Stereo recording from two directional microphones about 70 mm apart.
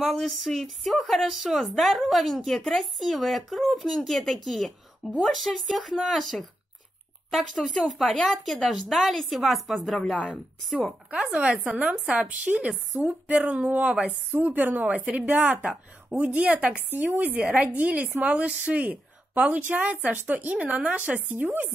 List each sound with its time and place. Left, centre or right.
0.0 s a woman's voice: centre; by 21.7 s right